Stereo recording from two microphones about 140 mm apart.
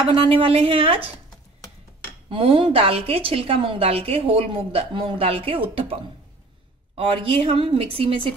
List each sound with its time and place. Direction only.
0.1 s a woman's voice: 40° right (ahead or behind)
2.2 s a woman's voice: 40° right (ahead or behind)
7.0 s a woman's voice: 40° right (ahead or behind)